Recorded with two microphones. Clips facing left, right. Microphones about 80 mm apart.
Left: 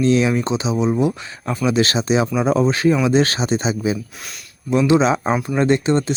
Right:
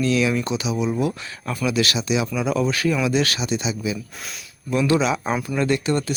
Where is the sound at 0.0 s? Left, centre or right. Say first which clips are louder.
Left 4 dB; left.